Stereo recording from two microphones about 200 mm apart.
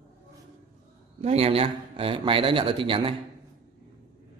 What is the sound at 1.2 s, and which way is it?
Speech, 30° right (ahead or behind).